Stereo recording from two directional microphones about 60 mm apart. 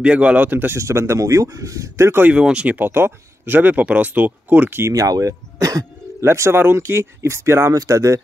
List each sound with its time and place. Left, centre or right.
0.0 s speech: centre
0.7 s speech: right
2.3 s speech: centre
2.9 s speech: right
4.9 s speech: right
6.2 s speech: right
7.7 s speech: right